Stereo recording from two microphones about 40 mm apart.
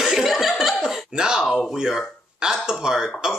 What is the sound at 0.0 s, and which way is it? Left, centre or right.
Laughter, centre.